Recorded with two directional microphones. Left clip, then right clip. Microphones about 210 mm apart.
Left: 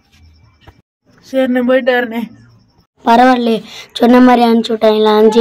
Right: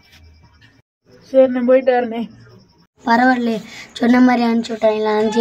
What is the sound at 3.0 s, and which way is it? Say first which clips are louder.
A woman's voice: left 6 dB; 25° left (ahead or behind).